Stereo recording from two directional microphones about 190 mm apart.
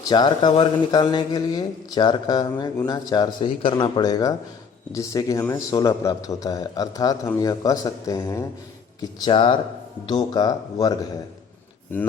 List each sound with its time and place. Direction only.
0.1 s speech: 25° left (ahead or behind)